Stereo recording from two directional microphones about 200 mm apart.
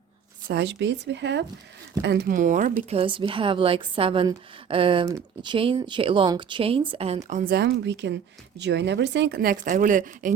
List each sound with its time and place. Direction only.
0.4 s speech: 55° right (ahead or behind); by 7.2 s 30° right (ahead or behind)
7.3 s speech: 40° right (ahead or behind)